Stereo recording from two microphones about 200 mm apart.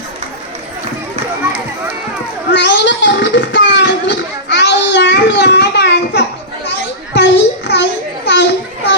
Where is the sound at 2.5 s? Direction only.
60° left (ahead or behind).